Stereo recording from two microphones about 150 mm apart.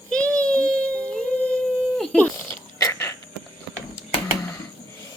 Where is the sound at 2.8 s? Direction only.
20° left (ahead or behind).